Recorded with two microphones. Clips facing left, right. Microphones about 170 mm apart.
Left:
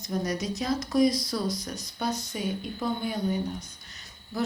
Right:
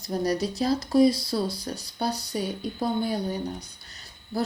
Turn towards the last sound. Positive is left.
turn(degrees=-35)  # may be behind; listen again after turning